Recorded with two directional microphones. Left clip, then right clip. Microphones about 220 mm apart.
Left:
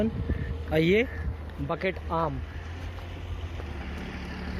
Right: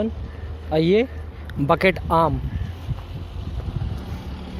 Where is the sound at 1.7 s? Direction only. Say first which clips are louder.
Right 12 dB; 50° right (ahead or behind).